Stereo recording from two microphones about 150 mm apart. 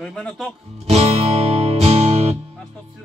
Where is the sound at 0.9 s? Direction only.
45° right (ahead or behind).